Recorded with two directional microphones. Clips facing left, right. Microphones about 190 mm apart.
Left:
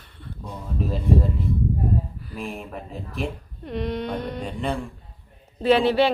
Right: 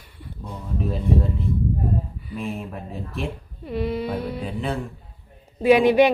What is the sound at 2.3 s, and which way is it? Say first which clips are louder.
A woman's voice: right 3 dB; centre (ahead or behind).